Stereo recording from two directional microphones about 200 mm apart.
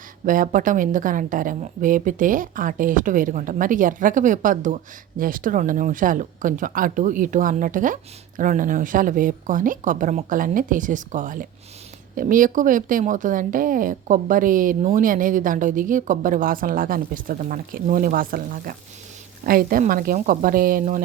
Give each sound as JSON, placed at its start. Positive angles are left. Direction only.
{"t": 0.3, "sound": "a woman's voice", "side_deg": -40}